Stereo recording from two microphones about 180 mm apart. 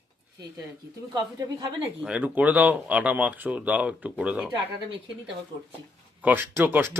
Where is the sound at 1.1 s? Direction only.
20° right (ahead or behind).